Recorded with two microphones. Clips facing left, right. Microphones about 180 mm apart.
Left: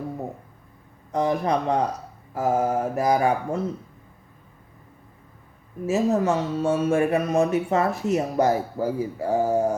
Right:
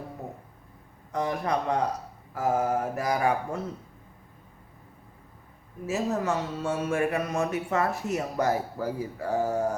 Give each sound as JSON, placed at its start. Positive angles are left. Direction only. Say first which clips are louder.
{"t": 1.1, "sound": "speech", "louder": "left 5 dB", "side_deg": 25}
{"t": 5.8, "sound": "speech", "louder": "left 6 dB", "side_deg": 25}